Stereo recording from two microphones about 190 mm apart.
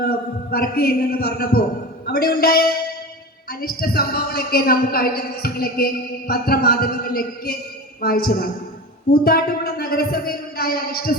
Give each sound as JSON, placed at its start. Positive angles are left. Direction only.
{"t": 0.0, "sound": "a man's voice", "side_deg": 50}